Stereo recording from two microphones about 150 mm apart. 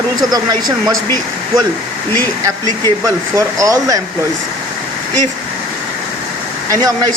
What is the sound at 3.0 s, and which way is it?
Speech, 20° right (ahead or behind).